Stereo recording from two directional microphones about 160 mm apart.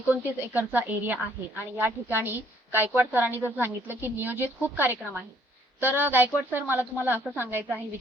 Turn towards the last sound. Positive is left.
turn(degrees=-10)  # may be behind; listen again after turning